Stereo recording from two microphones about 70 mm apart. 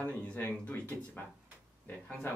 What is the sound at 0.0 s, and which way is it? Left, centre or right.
Speech, left.